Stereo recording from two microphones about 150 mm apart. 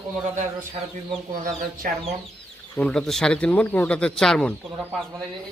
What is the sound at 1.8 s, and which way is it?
Speech, 65° right (ahead or behind).